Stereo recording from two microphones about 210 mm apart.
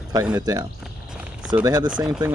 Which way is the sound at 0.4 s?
15° right (ahead or behind).